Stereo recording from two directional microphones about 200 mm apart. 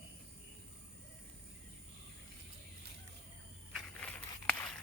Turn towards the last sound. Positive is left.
turn(degrees=5)  # may be behind; listen again after turning